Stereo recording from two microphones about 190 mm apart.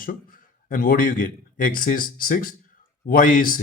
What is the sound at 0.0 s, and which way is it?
A man's voice, 50° left (ahead or behind).